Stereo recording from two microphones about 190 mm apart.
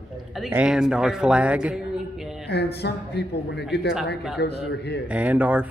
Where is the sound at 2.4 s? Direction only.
60° left (ahead or behind).